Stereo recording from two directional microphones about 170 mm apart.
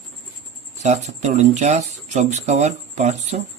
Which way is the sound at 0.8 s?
40° right (ahead or behind).